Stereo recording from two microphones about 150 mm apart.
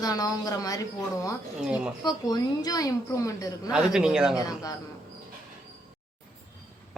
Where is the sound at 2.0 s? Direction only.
25° left (ahead or behind).